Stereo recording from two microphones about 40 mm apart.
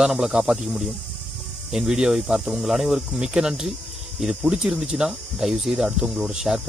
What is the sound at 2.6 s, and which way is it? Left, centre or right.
Speech, centre.